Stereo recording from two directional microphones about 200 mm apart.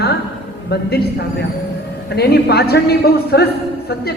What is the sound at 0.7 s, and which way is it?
A man's voice, 55° left (ahead or behind).